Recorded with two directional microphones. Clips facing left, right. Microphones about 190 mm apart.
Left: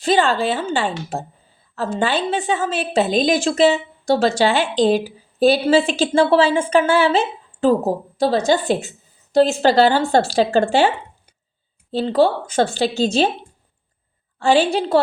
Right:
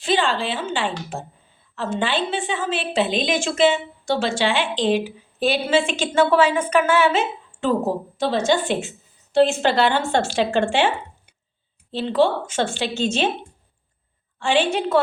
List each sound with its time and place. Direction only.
0.0 s a woman's voice: 40° left (ahead or behind)
14.3 s a woman's voice: 40° left (ahead or behind)